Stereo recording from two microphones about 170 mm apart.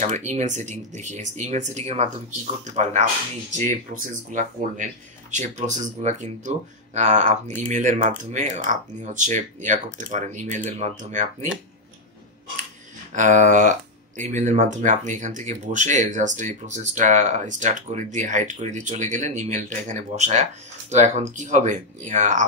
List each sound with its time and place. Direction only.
0.0 s speech: 45° right (ahead or behind)
13.1 s speech: 45° right (ahead or behind)